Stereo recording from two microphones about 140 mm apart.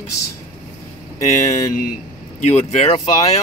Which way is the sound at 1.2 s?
55° left (ahead or behind).